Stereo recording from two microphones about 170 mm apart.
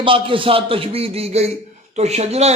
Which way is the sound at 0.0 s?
30° right (ahead or behind).